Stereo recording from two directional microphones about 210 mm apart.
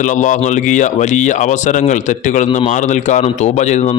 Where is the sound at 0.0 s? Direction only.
35° left (ahead or behind).